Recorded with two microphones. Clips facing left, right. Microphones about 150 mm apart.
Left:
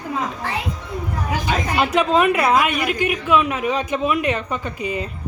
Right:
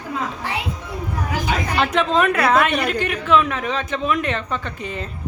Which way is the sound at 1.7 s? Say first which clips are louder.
Left 2 dB; 10° left (ahead or behind).